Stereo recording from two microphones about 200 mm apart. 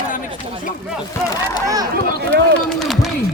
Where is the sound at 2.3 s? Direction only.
55° right (ahead or behind).